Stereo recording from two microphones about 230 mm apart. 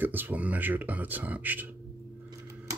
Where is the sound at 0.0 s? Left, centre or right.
Centre.